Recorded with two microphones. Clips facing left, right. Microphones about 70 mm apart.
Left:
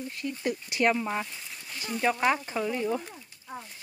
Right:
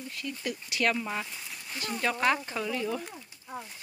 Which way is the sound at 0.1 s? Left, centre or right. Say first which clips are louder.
Left 4 dB; left.